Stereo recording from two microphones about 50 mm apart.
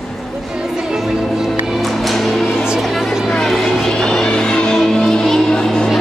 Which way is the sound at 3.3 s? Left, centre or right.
Centre.